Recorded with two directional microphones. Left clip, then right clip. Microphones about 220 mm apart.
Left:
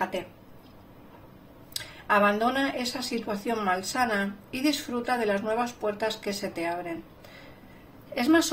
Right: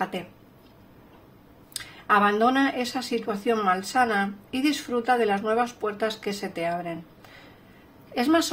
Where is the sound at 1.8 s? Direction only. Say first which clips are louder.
Right 2 dB; 35° right (ahead or behind).